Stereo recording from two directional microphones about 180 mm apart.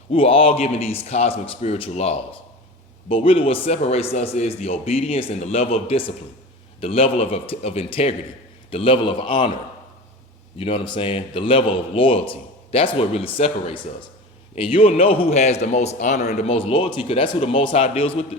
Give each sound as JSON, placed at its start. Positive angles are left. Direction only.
{"t": 0.1, "sound": "a man's voice", "side_deg": 30}
{"t": 10.6, "sound": "a man's voice", "side_deg": 30}